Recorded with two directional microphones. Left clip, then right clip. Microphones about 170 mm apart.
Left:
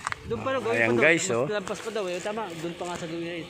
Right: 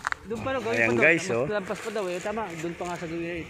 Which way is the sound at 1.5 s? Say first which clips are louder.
Even; 45° right (ahead or behind).